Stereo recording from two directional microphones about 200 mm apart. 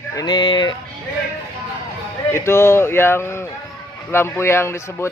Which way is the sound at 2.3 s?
10° left (ahead or behind).